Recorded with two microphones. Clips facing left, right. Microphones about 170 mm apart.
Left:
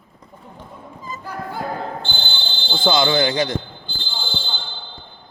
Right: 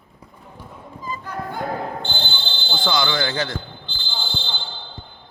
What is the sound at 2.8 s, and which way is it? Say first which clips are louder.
Speech: left 5 dB; 25° left (ahead or behind).